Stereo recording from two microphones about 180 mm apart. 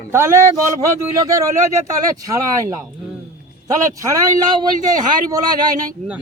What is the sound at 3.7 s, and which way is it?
A man's voice, 15° right (ahead or behind).